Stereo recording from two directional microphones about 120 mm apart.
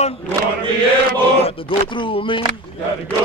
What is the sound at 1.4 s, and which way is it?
Speech, 45° left (ahead or behind).